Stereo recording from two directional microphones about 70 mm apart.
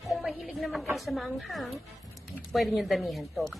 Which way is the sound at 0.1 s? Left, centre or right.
Centre.